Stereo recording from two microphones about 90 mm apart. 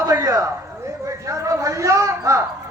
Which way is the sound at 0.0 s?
45° right (ahead or behind).